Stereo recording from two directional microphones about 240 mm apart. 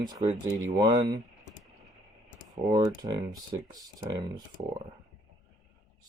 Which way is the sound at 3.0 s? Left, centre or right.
Centre.